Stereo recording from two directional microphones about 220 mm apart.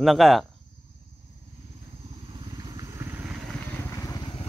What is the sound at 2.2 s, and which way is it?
Vehicle, 20° right (ahead or behind).